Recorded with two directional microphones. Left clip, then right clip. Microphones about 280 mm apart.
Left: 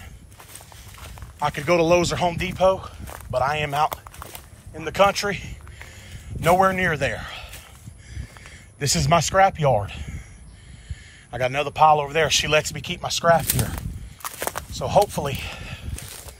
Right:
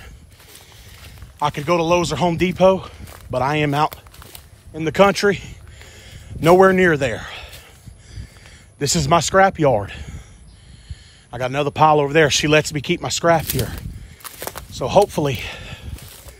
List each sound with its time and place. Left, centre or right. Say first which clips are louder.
1.4 s speech: right 1 dB; centre
8.7 s speech: right 3 dB; centre
11.2 s speech: right 2 dB; centre
14.4 s a sound: right 2 dB; centre